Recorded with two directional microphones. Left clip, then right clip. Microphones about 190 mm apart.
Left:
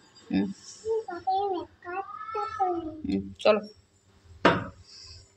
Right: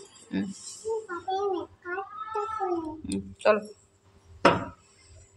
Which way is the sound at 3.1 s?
20° left (ahead or behind).